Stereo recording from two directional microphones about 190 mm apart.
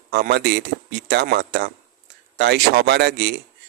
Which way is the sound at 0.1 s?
60° right (ahead or behind).